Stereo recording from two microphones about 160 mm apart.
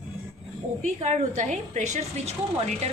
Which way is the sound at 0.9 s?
45° right (ahead or behind).